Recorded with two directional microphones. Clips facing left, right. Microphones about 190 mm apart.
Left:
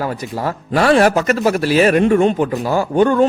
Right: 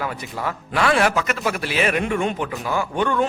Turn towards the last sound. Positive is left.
turn(degrees=40)  # may be behind; listen again after turning